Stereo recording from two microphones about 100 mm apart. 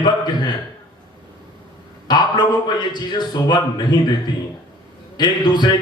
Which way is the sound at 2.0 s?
45° left (ahead or behind).